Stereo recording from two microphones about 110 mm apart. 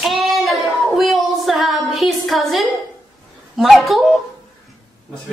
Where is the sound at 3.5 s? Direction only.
Centre (ahead or behind).